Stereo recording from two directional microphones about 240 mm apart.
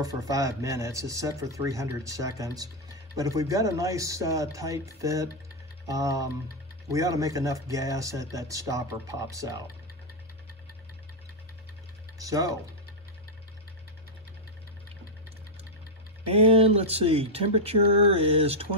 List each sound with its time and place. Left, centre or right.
0.0 s speech: centre
12.2 s speech: centre
16.3 s speech: right